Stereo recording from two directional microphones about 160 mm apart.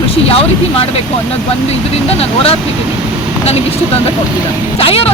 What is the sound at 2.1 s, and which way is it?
Speech, 40° left (ahead or behind).